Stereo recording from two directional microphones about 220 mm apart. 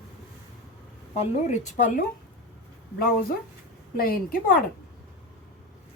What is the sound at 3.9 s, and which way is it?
Speech, 40° left (ahead or behind).